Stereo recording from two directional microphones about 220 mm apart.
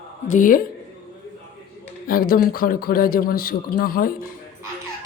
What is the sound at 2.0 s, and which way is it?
A woman's voice, 40° left (ahead or behind).